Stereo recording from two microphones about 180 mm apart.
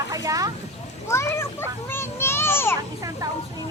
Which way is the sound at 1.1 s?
15° left (ahead or behind).